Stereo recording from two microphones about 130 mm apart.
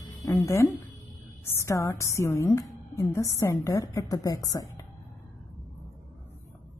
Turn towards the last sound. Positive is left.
turn(degrees=25)  # may be behind; listen again after turning